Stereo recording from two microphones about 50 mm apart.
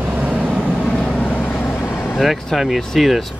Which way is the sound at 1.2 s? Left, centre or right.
Left.